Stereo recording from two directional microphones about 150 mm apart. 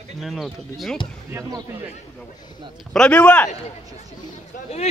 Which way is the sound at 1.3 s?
25° right (ahead or behind).